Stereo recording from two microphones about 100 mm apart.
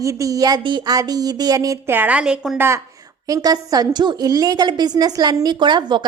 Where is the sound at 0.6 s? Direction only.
45° right (ahead or behind).